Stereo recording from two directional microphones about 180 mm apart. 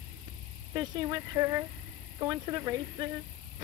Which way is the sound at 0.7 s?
20° right (ahead or behind).